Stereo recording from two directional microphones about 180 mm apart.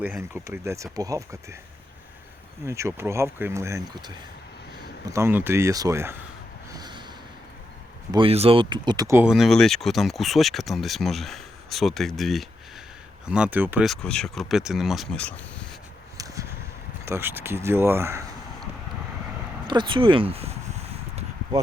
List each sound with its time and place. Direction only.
0.0 s speech: 10° right (ahead or behind)
2.6 s speech: 15° right (ahead or behind)
6.7 s a sound: 20° right (ahead or behind)
8.1 s speech: 30° right (ahead or behind); by 15.6 s 5° left (ahead or behind)
16.1 s a sound: 20° right (ahead or behind)
17.1 s speech: 10° right (ahead or behind)
19.6 s speech: 25° right (ahead or behind)